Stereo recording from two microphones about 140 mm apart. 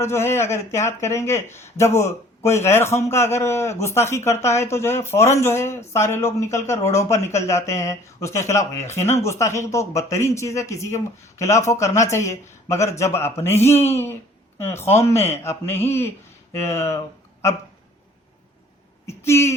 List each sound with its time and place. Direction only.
0.0 s a man's voice: 20° left (ahead or behind)
19.0 s speech: 20° left (ahead or behind)